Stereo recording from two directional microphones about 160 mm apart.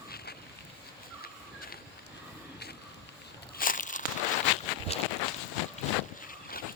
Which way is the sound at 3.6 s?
55° left (ahead or behind).